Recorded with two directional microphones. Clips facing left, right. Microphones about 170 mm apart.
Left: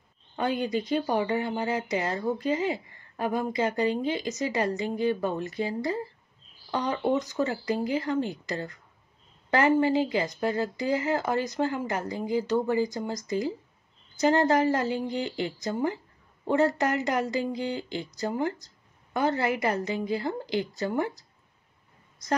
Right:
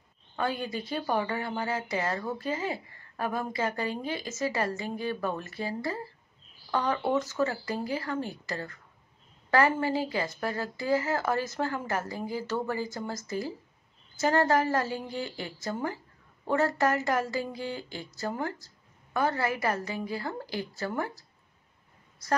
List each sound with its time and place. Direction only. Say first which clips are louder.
0.4 s a woman's voice: left 4 dB; 20° left (ahead or behind)